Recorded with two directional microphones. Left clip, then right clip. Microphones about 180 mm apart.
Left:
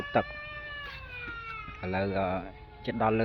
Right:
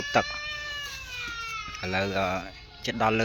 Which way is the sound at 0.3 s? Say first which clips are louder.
Right 6 dB; 40° left (ahead or behind).